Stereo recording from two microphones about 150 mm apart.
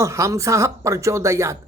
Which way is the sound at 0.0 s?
20° right (ahead or behind).